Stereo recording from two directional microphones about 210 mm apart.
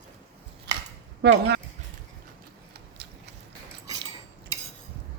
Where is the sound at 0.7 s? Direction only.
55° right (ahead or behind).